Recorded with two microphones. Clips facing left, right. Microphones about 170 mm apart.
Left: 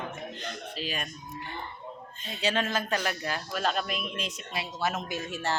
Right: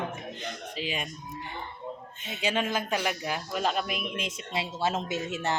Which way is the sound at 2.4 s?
10° right (ahead or behind).